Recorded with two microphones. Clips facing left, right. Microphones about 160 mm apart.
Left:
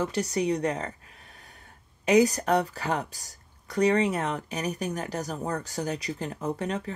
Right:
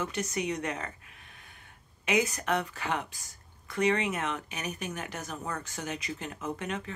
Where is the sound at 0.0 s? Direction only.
35° left (ahead or behind).